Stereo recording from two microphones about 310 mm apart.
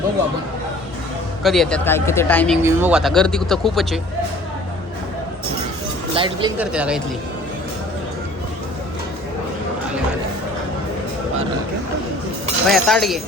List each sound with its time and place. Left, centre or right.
1.5 s speech: centre
6.1 s speech: centre
6.6 s speech: centre
12.6 s speech: centre